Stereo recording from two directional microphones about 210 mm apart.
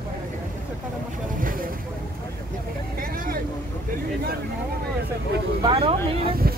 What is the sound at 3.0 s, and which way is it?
Vehicle, 45° right (ahead or behind).